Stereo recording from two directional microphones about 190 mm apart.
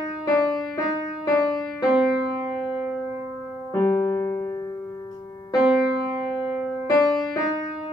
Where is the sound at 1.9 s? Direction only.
5° right (ahead or behind).